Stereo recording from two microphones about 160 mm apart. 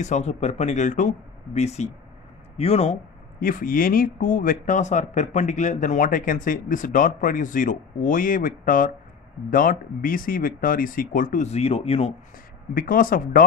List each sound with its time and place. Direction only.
0.0 s speech: 45° left (ahead or behind)
3.3 s speech: 60° left (ahead or behind); by 12.1 s 40° left (ahead or behind)
12.7 s speech: 60° left (ahead or behind)